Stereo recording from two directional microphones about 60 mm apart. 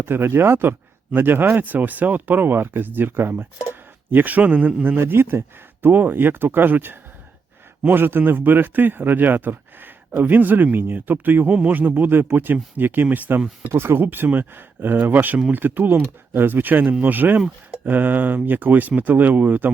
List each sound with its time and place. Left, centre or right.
0.0 s a man's voice: right
4.9 s a man's voice: right